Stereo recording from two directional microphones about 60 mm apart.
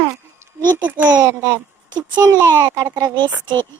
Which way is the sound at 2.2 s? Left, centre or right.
Right.